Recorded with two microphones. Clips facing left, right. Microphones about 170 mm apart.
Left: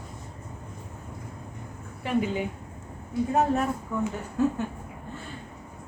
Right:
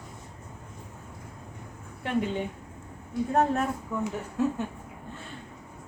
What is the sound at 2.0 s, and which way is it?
A woman's voice, 5° left (ahead or behind).